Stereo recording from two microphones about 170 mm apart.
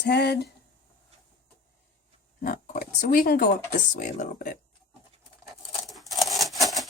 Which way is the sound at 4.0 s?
50° left (ahead or behind).